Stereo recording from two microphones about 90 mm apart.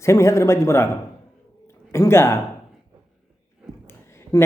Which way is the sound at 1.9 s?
30° left (ahead or behind).